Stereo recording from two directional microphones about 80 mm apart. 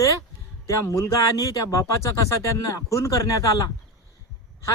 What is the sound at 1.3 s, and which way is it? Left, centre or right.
Speech, left.